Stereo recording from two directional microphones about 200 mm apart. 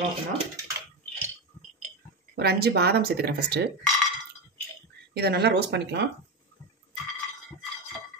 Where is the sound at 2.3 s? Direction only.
55° right (ahead or behind).